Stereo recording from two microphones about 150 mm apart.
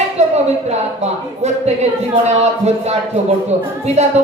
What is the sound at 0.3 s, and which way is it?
Speech, 45° right (ahead or behind).